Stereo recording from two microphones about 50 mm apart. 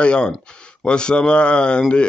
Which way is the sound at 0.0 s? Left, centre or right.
Left.